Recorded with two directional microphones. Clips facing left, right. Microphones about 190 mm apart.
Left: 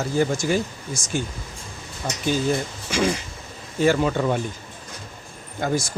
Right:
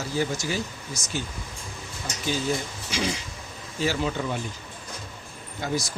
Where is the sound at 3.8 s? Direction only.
55° left (ahead or behind).